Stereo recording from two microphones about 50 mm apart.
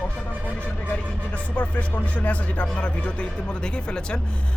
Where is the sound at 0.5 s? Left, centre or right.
Left.